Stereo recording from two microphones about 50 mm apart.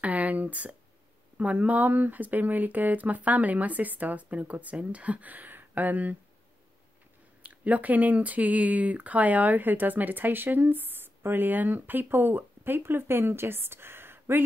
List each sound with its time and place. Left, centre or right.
0.0 s speech: right
7.4 s speech: right